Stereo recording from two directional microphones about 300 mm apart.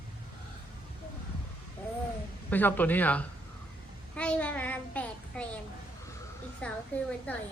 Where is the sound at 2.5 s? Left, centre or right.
Centre.